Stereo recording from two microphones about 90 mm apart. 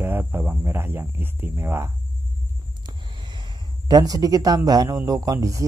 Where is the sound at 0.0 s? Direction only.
25° right (ahead or behind).